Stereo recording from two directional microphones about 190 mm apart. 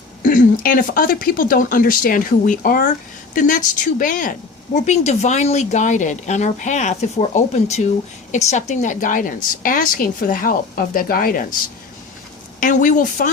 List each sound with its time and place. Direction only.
0.2 s a woman's voice: 45° left (ahead or behind)
12.5 s a woman's voice: 45° left (ahead or behind)